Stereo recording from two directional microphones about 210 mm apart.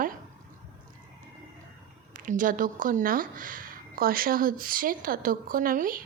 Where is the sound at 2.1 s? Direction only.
40° right (ahead or behind).